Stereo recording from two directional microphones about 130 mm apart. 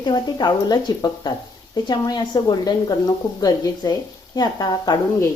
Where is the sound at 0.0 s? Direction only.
30° left (ahead or behind).